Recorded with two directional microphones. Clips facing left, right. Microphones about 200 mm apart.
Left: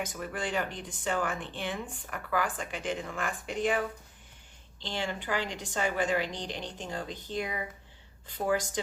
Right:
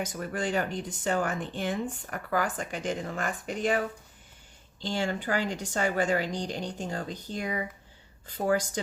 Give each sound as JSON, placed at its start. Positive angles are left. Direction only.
{"t": 0.0, "sound": "speech", "side_deg": -45}